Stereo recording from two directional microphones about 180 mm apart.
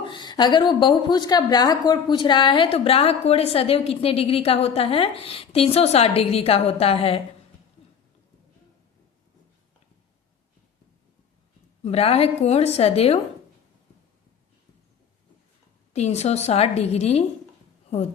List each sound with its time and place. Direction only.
0.0 s a woman's voice: 25° left (ahead or behind)
11.9 s a woman's voice: 35° left (ahead or behind)
15.9 s a woman's voice: 40° left (ahead or behind)